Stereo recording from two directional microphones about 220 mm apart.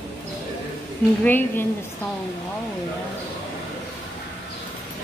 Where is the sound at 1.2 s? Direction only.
10° left (ahead or behind).